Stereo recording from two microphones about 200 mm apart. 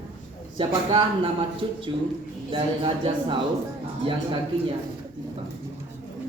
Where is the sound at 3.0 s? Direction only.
25° right (ahead or behind).